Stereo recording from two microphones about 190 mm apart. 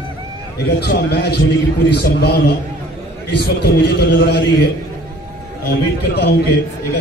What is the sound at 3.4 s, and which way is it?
A man's voice, 60° left (ahead or behind).